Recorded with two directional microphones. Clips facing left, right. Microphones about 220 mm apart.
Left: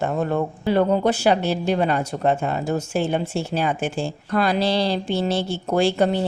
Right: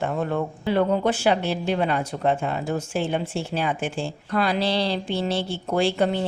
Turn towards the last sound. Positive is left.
turn(degrees=40)  # may be behind; listen again after turning